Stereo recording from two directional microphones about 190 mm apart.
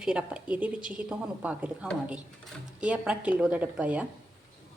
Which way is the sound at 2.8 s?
5° right (ahead or behind).